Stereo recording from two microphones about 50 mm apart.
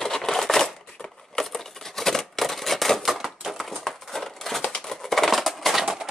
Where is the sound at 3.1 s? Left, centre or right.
Centre.